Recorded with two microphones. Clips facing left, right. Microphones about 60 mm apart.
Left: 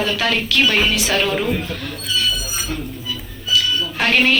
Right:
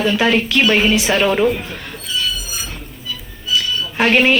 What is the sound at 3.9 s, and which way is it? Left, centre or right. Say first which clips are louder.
Speech: right 4 dB; centre.